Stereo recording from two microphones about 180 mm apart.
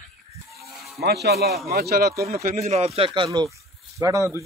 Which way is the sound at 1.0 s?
65° right (ahead or behind).